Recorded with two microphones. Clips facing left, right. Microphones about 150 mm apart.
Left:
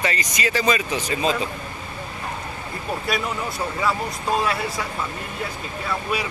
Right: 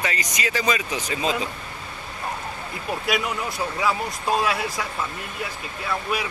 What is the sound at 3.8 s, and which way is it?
Speech, centre (ahead or behind).